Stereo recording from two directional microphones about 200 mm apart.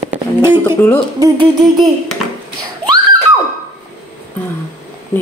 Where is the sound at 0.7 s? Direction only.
10° left (ahead or behind).